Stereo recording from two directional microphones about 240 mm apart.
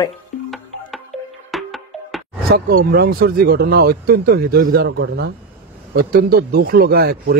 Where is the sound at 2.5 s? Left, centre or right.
Right.